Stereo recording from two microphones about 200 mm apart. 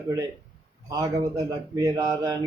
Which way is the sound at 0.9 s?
15° right (ahead or behind).